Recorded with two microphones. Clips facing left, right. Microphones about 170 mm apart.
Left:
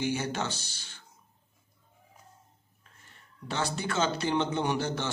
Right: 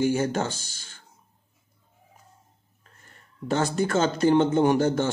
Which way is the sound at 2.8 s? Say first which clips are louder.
Right 3 dB; 45° right (ahead or behind).